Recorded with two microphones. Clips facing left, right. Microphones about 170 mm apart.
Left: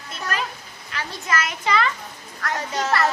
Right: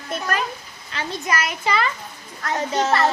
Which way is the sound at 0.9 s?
25° right (ahead or behind).